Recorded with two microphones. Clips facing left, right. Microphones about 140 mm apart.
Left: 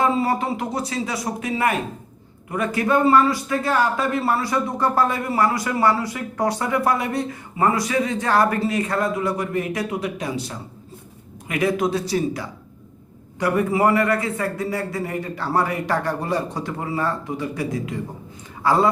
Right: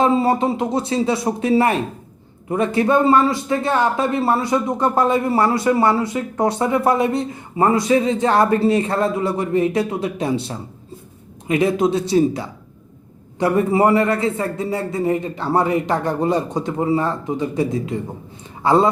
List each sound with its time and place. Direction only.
0.0 s a man's voice: 25° right (ahead or behind)